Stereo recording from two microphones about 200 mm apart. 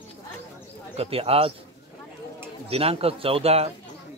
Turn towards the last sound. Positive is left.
turn(degrees=-30)  # may be behind; listen again after turning